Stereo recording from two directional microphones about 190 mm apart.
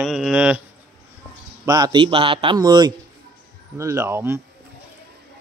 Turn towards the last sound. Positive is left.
turn(degrees=-15)  # may be behind; listen again after turning